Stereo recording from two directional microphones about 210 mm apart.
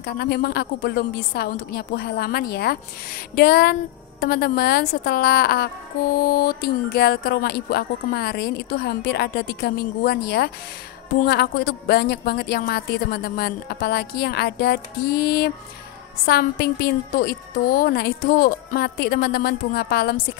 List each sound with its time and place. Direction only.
0.0 s a woman's voice: 50° left (ahead or behind)